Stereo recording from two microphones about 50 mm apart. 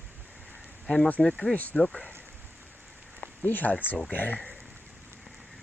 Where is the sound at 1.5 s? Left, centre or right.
Left.